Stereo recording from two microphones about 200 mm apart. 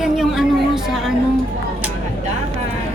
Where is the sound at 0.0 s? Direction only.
Centre (ahead or behind).